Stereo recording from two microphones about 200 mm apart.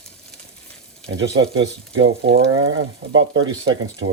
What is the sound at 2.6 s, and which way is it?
Speech, 80° right.